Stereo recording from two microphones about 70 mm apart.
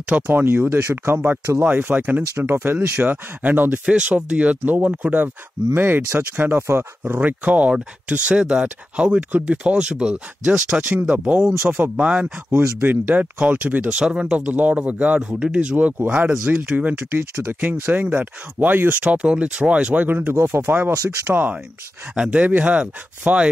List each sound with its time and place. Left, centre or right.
0.1 s speech: right
7.2 s speech: right
15.7 s speech: right
20.3 s speech: right
20.6 s speech: right
20.9 s speech: right
22.1 s speech: centre